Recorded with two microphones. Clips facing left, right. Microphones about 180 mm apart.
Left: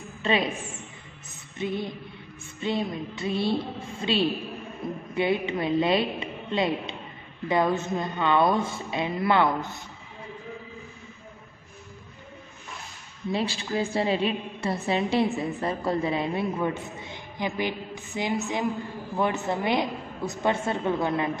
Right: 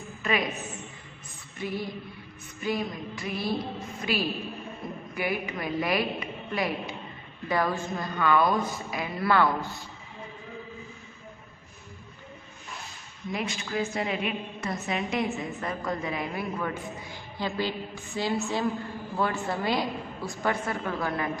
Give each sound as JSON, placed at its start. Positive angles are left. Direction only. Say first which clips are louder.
{"t": 0.2, "sound": "a woman's voice", "louder": "left 3 dB", "side_deg": 30}
{"t": 1.6, "sound": "a woman's voice", "louder": "left 3 dB", "side_deg": 20}
{"t": 13.3, "sound": "a woman's voice", "louder": "left 4 dB", "side_deg": 30}